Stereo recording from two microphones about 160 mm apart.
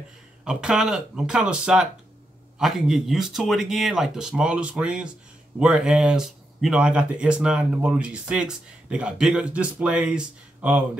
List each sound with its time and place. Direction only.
0.5 s speech: 5° right (ahead or behind)